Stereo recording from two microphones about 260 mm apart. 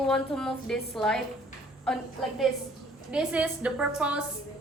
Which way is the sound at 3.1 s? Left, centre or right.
Centre.